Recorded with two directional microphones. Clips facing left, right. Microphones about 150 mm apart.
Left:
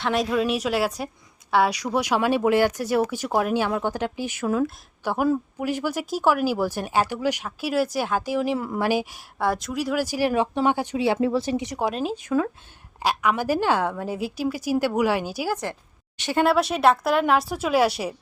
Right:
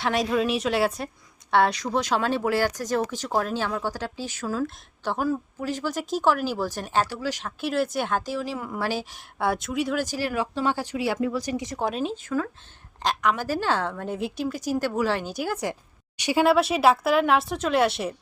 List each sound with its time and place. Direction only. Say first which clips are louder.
0.0 s a woman's voice: left 1 dB; centre (ahead or behind); by 8.5 s 15° left (ahead or behind)
8.5 s a woman's voice: left 5 dB; 35° left (ahead or behind)
8.8 s speech: left 4 dB; 15° left (ahead or behind)
9.4 s speech: left 1 dB; centre (ahead or behind); by 11.8 s 20° left (ahead or behind)
11.8 s a woman's voice: left 2 dB; centre (ahead or behind)
15.6 s a sound: right 2 dB; 15° right (ahead or behind)
16.4 s a woman's voice: even; centre (ahead or behind)